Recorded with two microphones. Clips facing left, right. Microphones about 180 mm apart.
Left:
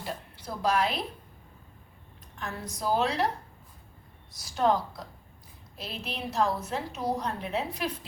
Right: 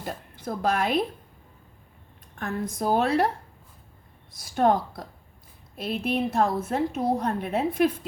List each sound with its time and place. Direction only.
0.0 s a woman's voice: 50° right (ahead or behind)
2.4 s a woman's voice: 50° right (ahead or behind)
4.3 s a woman's voice: 55° right (ahead or behind)